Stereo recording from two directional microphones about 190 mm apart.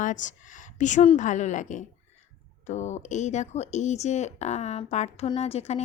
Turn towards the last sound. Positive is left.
turn(degrees=35)  # may be behind; listen again after turning